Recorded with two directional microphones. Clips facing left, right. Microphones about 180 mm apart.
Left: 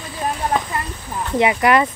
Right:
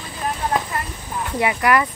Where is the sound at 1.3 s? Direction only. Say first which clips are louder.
Left 3 dB; 20° left (ahead or behind).